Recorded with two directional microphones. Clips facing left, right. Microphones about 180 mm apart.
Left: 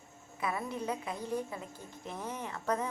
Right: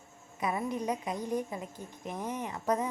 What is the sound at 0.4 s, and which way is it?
A woman's voice, 20° right (ahead or behind).